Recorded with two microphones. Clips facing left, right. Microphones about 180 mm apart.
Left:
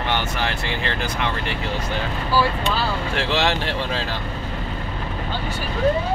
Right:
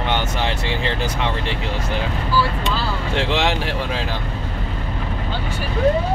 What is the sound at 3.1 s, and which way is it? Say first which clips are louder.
Speech: right 3 dB; 20° right (ahead or behind).